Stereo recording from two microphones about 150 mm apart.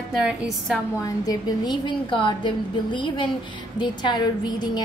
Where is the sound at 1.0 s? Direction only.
25° left (ahead or behind).